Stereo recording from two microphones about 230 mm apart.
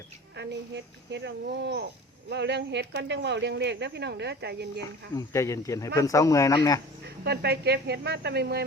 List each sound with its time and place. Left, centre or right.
0.3 s speech: right
4.8 s speech: centre
7.0 s speech: right